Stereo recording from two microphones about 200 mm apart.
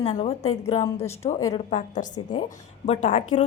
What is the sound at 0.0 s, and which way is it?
Speech, 30° left (ahead or behind).